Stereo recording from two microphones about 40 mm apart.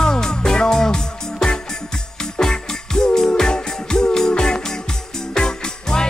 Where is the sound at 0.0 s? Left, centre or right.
Centre.